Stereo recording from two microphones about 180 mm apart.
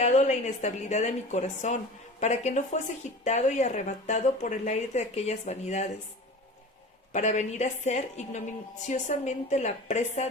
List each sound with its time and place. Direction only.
0.0 s speech: 40° left (ahead or behind)
7.1 s speech: 40° left (ahead or behind)